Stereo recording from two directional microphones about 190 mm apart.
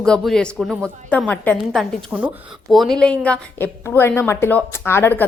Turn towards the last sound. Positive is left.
turn(degrees=10)  # may be behind; listen again after turning